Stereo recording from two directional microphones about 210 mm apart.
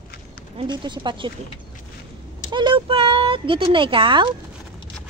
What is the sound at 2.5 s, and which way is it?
Speech, 20° right (ahead or behind).